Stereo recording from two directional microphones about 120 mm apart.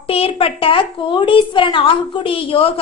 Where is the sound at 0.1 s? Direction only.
50° left (ahead or behind).